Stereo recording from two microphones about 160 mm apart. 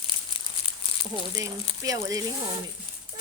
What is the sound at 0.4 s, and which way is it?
Crumpling, 30° left (ahead or behind).